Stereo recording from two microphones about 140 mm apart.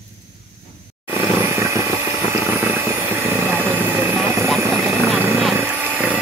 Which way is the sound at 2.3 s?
15° right (ahead or behind).